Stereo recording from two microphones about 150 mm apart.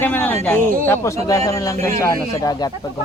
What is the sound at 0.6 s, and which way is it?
Speech, 65° right (ahead or behind).